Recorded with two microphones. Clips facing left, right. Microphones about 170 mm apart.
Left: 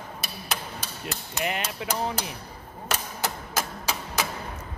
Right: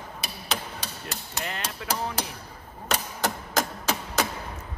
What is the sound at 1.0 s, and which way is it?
Hammer, 15° left (ahead or behind).